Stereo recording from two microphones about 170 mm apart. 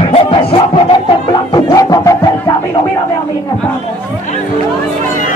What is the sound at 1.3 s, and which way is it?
Music, 25° left (ahead or behind).